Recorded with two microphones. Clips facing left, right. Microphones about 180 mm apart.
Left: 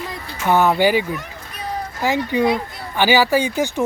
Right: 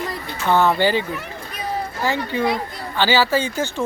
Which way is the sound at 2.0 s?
15° left (ahead or behind).